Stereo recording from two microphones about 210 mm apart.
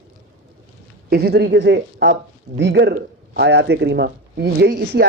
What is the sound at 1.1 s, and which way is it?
Speech, 50° right (ahead or behind).